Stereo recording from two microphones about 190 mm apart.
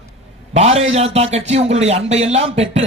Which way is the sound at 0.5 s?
35° right (ahead or behind).